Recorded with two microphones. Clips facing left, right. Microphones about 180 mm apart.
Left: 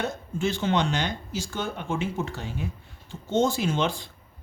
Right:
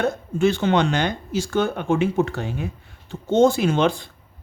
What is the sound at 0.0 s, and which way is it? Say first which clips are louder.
Speech: right 8 dB; 65° right (ahead or behind).